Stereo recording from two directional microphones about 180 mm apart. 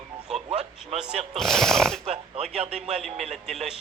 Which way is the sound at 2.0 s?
35° right (ahead or behind).